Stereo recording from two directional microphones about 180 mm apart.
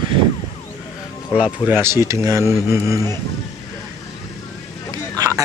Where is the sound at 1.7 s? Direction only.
15° right (ahead or behind).